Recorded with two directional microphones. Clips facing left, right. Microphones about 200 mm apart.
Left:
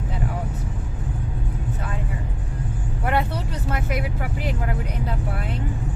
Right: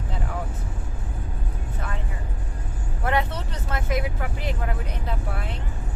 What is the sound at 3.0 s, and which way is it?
Vehicle, 10° left (ahead or behind).